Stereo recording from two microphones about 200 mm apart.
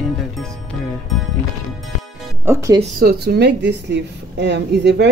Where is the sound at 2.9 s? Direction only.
50° right (ahead or behind).